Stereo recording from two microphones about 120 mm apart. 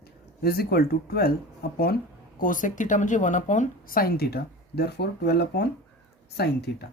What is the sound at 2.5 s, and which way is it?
Speech, 90° left.